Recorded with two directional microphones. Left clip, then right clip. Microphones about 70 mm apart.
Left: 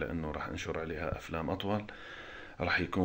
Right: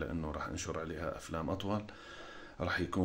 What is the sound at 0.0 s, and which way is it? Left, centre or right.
Speech, right.